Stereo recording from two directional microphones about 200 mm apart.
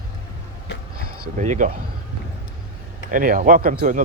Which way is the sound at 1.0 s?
45° right (ahead or behind).